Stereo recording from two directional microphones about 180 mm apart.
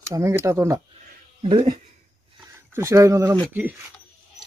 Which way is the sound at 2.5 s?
15° right (ahead or behind).